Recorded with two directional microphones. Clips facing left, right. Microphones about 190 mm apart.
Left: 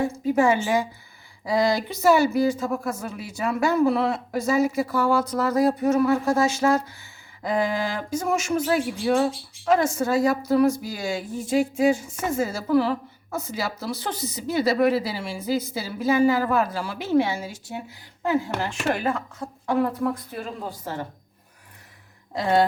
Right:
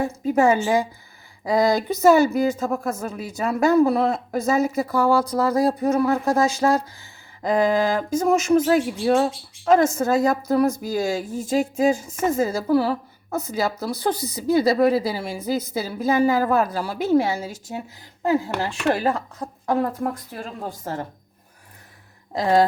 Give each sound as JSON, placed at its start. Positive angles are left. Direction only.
{"t": 0.0, "sound": "a woman's voice", "side_deg": -40}